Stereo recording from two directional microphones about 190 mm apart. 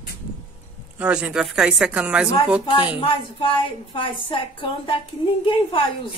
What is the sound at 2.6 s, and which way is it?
A woman's voice, 25° left (ahead or behind).